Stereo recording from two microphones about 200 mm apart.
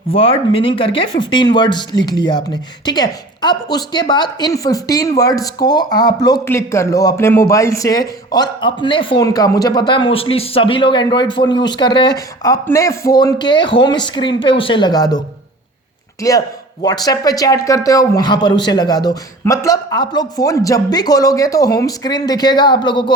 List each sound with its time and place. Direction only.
0.1 s speech: 25° left (ahead or behind)
16.2 s speech: 15° left (ahead or behind)